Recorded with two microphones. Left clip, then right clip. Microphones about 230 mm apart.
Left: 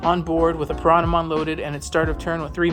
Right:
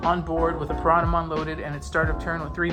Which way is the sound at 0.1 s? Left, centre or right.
Left.